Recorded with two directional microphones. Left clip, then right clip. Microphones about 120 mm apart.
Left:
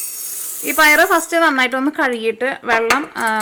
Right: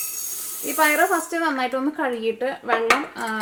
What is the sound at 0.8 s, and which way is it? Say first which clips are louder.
Speech: left 7 dB; 50° left (ahead or behind).